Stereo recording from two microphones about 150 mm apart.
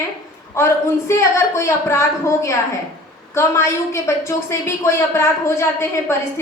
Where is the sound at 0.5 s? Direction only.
20° left (ahead or behind).